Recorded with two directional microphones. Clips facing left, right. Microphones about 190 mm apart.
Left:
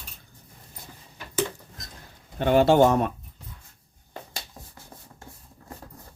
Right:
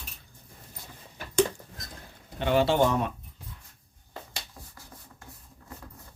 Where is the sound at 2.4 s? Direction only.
50° left (ahead or behind).